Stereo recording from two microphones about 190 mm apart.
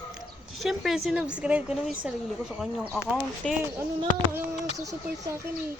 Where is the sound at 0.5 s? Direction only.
Centre (ahead or behind).